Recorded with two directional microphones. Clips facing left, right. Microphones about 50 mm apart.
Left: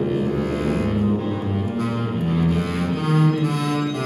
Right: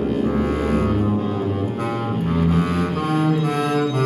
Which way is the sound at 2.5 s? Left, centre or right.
Centre.